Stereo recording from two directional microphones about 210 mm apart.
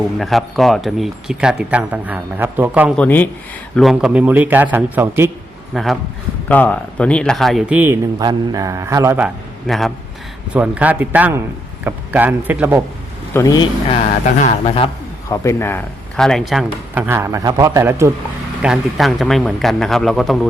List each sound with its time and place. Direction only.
0.2 s speech: centre (ahead or behind)
2.9 s speech: 5° left (ahead or behind); by 5.3 s 10° right (ahead or behind)
5.7 s speech: centre (ahead or behind)
8.2 s speech: 20° right (ahead or behind)
13.3 s speech: 15° left (ahead or behind)
14.4 s speech: 25° left (ahead or behind)
15.3 s speech: 15° left (ahead or behind); by 18.1 s 15° right (ahead or behind)
18.6 s speech: centre (ahead or behind)